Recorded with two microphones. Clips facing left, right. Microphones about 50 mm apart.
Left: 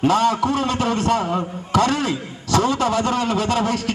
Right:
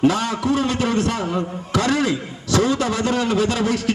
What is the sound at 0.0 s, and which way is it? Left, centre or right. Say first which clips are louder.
A man's voice: left 2 dB; left.